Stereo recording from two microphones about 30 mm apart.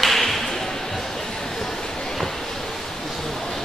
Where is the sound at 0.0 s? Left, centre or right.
Centre.